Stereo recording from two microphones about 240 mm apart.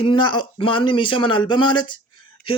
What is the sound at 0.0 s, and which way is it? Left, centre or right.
Speech, centre.